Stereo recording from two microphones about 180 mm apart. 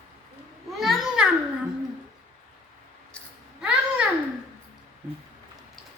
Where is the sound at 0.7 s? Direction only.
Centre (ahead or behind).